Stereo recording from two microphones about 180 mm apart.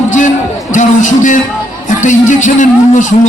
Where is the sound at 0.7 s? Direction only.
45° left (ahead or behind).